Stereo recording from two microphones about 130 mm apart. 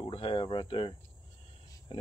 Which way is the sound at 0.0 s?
40° left (ahead or behind).